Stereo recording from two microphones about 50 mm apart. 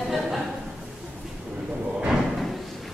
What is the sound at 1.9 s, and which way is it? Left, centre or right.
Slam, centre.